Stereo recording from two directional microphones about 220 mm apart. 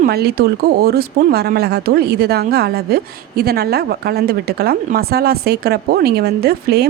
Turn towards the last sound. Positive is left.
turn(degrees=-45)  # may be behind; listen again after turning